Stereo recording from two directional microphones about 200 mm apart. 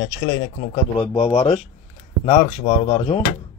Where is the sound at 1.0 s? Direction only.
25° left (ahead or behind).